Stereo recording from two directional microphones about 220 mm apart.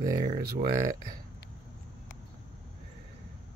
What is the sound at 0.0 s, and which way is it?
Speech, 20° right (ahead or behind).